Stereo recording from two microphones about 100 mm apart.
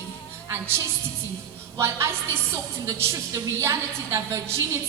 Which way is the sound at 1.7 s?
25° right (ahead or behind).